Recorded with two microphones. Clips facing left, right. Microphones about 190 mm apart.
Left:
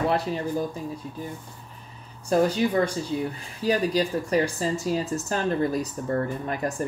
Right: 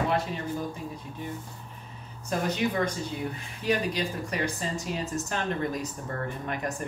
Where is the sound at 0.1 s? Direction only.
35° left (ahead or behind).